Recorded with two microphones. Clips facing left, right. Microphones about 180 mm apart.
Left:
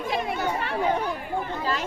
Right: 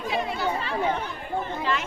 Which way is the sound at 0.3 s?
60° left (ahead or behind).